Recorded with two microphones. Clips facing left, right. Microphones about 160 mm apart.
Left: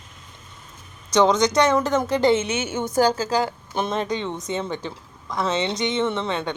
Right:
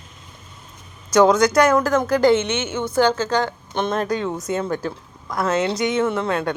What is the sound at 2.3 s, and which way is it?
A woman's voice, 30° left (ahead or behind).